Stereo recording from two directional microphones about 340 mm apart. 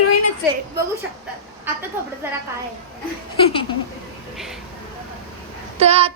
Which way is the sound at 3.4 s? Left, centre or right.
Centre.